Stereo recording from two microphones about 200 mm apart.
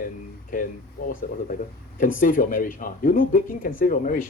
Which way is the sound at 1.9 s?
45° left (ahead or behind).